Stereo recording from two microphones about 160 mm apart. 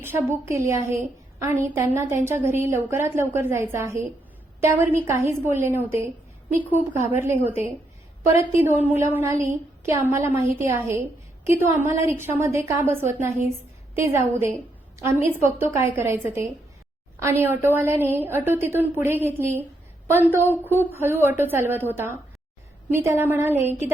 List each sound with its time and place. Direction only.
0.0 s a woman's voice: 15° right (ahead or behind)
20.7 s a woman's voice: 15° right (ahead or behind)